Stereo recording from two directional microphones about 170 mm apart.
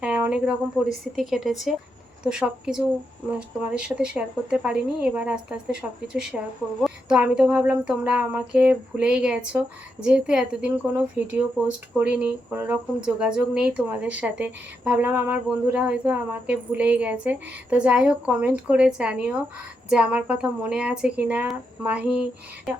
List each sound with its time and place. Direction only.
0.0 s speech: 5° right (ahead or behind)